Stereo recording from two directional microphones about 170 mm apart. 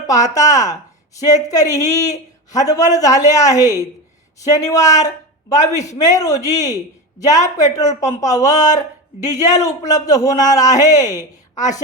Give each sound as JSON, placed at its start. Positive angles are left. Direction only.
{"t": 0.1, "sound": "a man's voice", "side_deg": 20}